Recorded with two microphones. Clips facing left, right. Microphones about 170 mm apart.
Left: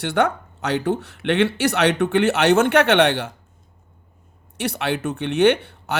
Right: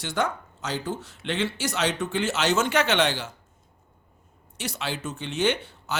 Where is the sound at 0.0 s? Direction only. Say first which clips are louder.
Left 7 dB; 60° left (ahead or behind).